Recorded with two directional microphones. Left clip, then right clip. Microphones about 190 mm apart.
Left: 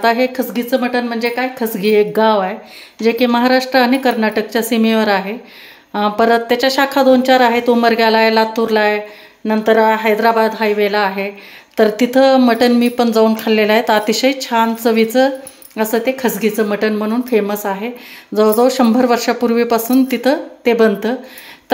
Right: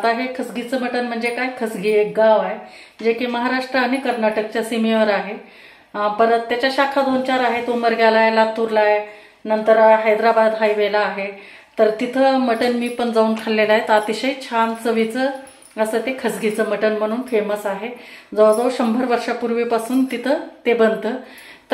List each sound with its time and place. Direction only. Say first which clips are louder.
0.0 s a woman's voice: left 6 dB; 45° left (ahead or behind)
5.9 s speech: left 3 dB; 60° left (ahead or behind)
11.7 s speech: left 4 dB; 55° left (ahead or behind)